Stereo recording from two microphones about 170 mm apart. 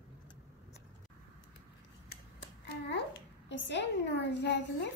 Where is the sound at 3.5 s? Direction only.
90° left.